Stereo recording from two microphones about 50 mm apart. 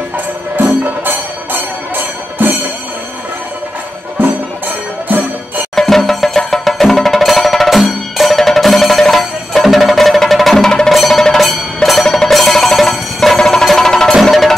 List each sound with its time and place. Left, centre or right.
0.6 s music: right
5.8 s music: centre